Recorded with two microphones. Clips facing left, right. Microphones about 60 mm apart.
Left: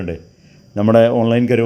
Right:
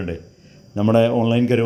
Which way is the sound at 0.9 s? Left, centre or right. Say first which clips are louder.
Left 5 dB; left.